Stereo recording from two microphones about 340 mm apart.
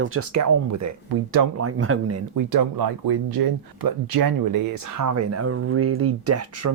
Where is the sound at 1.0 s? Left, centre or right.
Right.